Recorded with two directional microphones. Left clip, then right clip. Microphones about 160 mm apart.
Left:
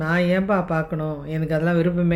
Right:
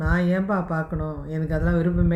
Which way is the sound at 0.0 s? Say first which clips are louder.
Left 4 dB; 45° left (ahead or behind).